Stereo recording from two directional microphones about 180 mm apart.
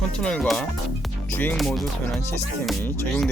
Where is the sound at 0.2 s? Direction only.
5° left (ahead or behind).